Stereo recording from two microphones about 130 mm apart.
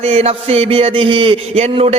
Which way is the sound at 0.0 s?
55° right (ahead or behind).